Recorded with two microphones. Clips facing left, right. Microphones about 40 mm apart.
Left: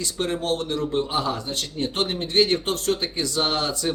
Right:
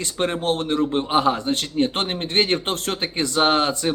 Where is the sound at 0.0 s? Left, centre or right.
Right.